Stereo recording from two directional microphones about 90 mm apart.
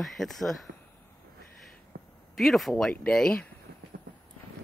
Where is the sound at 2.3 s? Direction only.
Centre (ahead or behind).